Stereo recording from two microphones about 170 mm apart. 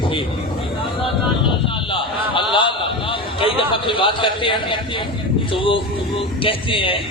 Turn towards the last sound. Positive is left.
turn(degrees=30)  # may be behind; listen again after turning